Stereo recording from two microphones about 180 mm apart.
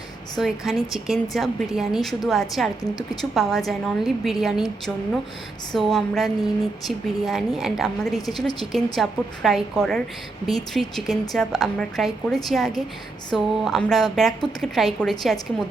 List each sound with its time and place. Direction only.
0.3 s a woman's voice: centre (ahead or behind)
5.7 s a woman's voice: centre (ahead or behind)